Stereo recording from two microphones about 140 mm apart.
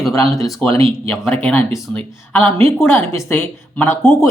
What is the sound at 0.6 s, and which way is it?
Speech, 10° left (ahead or behind).